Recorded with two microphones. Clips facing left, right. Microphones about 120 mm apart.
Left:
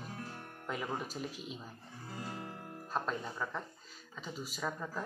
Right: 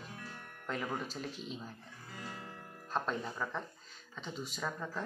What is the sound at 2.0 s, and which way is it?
Music, 30° left (ahead or behind).